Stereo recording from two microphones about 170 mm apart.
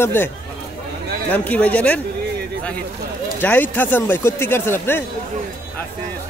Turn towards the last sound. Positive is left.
turn(degrees=15)  # may be behind; listen again after turning